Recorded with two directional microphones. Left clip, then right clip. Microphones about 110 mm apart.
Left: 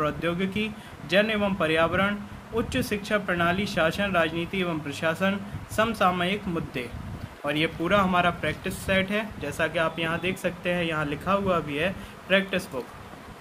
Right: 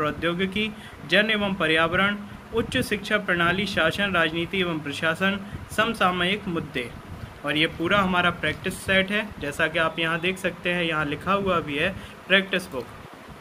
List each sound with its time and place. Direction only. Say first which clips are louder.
0.0 s speech: right 2 dB; 35° left (ahead or behind)
10.4 s speech: right 2 dB; 50° left (ahead or behind)